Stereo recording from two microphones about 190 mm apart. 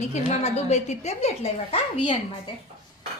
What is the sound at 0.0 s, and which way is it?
A woman's voice, 35° left (ahead or behind).